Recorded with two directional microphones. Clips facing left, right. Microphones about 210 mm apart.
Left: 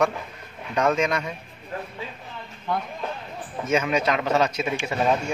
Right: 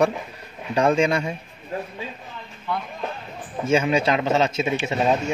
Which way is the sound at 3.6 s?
30° right (ahead or behind).